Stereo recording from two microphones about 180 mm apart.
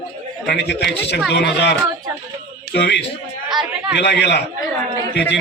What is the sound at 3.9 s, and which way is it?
Speech, 70° left (ahead or behind).